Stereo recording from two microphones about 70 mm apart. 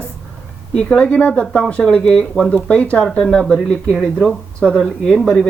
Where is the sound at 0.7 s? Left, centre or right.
Centre.